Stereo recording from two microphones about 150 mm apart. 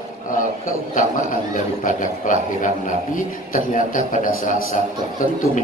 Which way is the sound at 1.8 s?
60° left (ahead or behind).